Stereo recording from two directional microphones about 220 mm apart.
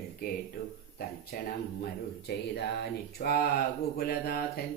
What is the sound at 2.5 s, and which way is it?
Mantra, 45° left (ahead or behind).